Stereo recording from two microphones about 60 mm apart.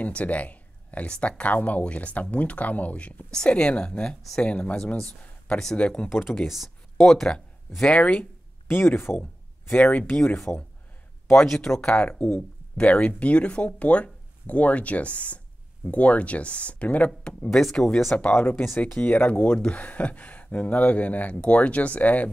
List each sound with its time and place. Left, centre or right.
0.0 s speech: left
3.3 s speech: centre
6.4 s speech: centre
7.9 s speech: centre
8.6 s speech: left
9.2 s speech: left
10.1 s speech: centre
17.6 s speech: centre
18.3 s speech: left